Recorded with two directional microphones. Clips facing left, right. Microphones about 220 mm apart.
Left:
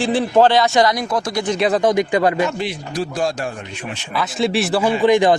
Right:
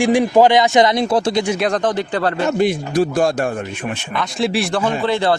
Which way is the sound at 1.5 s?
Centre (ahead or behind).